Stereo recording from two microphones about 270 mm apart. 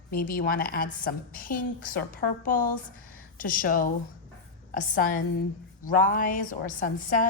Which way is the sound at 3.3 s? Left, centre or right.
Left.